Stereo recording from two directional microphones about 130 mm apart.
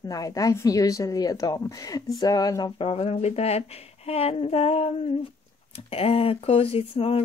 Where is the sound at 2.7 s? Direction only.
45° left (ahead or behind).